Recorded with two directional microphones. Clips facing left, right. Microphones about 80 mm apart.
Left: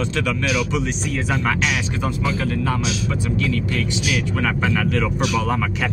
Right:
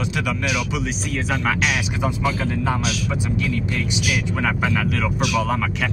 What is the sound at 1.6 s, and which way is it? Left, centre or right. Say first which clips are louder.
Speech: even; centre.